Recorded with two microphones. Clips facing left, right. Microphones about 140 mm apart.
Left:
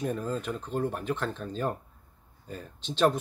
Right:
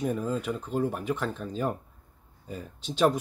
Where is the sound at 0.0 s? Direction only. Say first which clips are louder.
Right 2 dB; 5° right (ahead or behind).